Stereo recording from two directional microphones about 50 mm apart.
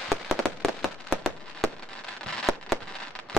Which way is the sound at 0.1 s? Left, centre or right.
Centre.